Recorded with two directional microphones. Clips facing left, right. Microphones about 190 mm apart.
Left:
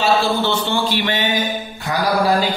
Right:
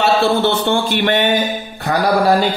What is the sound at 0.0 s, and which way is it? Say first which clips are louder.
Speech: right 3 dB; 60° right (ahead or behind).